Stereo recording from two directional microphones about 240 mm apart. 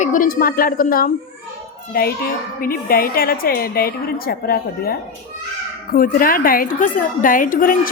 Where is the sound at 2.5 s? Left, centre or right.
Left.